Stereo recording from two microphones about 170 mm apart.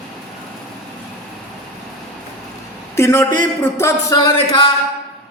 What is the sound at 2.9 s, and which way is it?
Speech, 15° left (ahead or behind).